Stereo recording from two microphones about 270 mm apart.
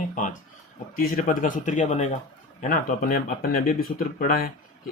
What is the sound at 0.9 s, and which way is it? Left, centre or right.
Speech, left.